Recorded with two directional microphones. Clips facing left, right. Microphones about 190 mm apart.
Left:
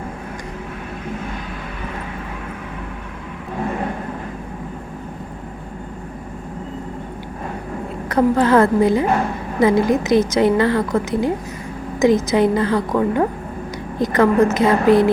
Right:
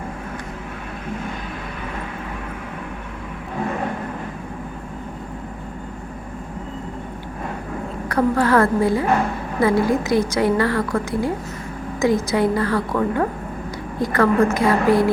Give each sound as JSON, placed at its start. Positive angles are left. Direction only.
{"t": 8.1, "sound": "a woman's voice", "side_deg": 20}